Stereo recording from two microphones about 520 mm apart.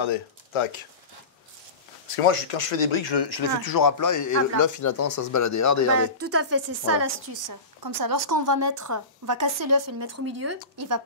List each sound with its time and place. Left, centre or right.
0.0 s speech: left
2.1 s speech: left
6.1 s a woman's voice: right
7.8 s a woman's voice: right